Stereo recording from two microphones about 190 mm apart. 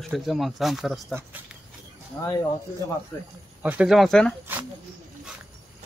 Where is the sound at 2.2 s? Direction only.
20° left (ahead or behind).